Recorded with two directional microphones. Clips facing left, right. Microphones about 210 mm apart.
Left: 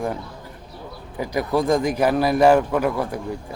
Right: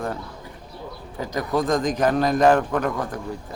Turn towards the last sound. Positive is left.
turn(degrees=10)  # may be behind; listen again after turning